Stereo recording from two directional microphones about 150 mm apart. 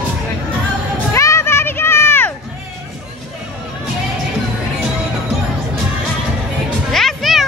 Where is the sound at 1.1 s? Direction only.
20° left (ahead or behind).